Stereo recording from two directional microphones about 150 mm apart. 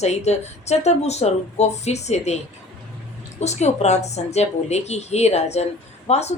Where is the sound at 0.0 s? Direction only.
50° left (ahead or behind).